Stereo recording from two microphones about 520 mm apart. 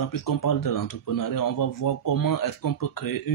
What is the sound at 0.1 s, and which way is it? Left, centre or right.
Speech, left.